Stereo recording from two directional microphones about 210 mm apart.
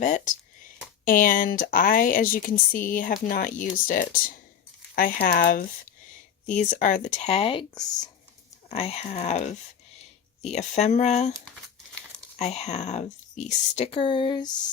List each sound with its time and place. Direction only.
0.0 s speech: 35° left (ahead or behind)
12.4 s speech: 30° left (ahead or behind)